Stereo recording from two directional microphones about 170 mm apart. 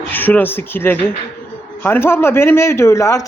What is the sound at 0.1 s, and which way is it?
A man's voice, 10° left (ahead or behind).